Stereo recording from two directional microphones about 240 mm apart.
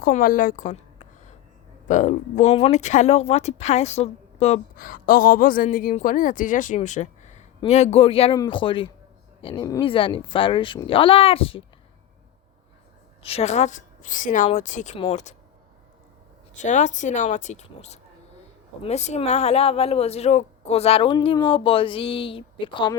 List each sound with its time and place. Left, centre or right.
0.0 s a woman's voice: left
13.2 s a woman's voice: left
16.6 s speech: left